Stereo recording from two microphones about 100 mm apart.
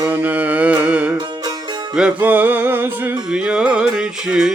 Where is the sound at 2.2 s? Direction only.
20° right (ahead or behind).